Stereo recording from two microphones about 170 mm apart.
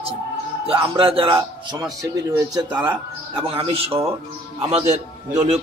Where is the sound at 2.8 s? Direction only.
30° right (ahead or behind).